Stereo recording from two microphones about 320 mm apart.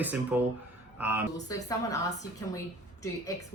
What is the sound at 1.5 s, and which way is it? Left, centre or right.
Speech, centre.